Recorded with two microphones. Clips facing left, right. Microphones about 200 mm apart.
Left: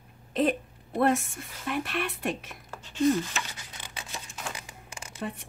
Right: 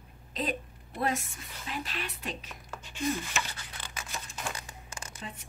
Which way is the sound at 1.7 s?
60° left (ahead or behind).